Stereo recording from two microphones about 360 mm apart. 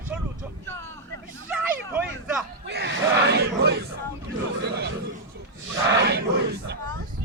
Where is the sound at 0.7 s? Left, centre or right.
Centre.